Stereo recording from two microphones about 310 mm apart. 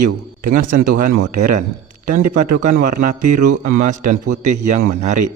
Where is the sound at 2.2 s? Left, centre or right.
Right.